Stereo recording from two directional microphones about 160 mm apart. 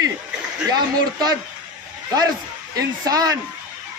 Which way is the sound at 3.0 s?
25° right (ahead or behind).